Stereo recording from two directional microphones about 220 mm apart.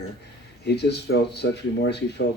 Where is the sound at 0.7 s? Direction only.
50° left (ahead or behind).